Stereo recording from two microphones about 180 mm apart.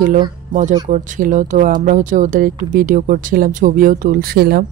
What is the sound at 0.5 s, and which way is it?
Speech, 45° right (ahead or behind).